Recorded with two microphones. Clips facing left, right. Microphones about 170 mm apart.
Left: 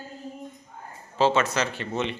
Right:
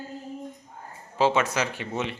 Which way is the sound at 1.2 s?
10° right (ahead or behind).